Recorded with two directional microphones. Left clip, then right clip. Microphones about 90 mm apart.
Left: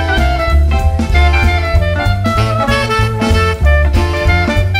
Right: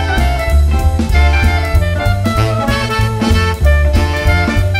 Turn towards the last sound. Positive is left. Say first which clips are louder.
# left 1 dB
turn(degrees=0)  # may be behind; listen again after turning